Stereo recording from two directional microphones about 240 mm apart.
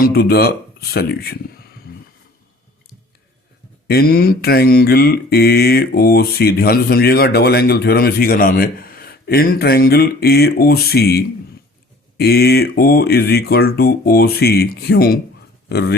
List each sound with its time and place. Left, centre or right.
0.0 s mantra: left
1.9 s a sound: left
3.8 s mantra: left